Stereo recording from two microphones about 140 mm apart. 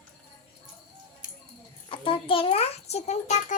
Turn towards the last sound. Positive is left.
turn(degrees=55)  # may be behind; listen again after turning